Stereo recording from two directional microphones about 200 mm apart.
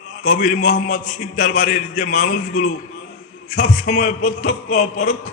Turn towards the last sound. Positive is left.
turn(degrees=35)  # may be behind; listen again after turning